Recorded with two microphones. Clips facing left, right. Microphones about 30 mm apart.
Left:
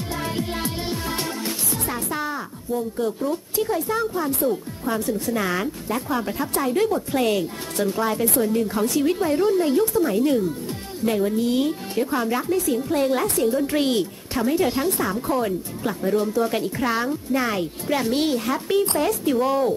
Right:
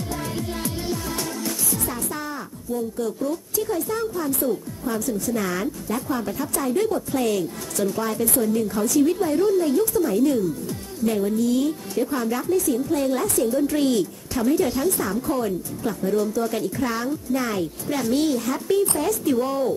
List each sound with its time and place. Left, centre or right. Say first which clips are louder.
0.1 s music: left 3 dB; left
3.0 s a woman's voice: left 1 dB; left
4.4 s speech: left 2 dB; centre
5.3 s a woman's voice: left 1 dB; left
12.0 s a woman's voice: left 1 dB; left
16.2 s a woman's voice: left 1 dB; left
19.4 s speech: left 3 dB; centre